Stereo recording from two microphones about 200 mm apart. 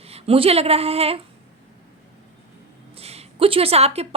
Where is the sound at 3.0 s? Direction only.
30° right (ahead or behind).